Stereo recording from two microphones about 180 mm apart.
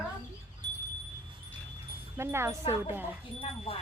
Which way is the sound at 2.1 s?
15° right (ahead or behind).